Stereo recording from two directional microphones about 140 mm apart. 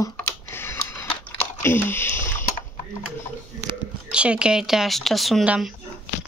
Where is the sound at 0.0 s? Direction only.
15° left (ahead or behind).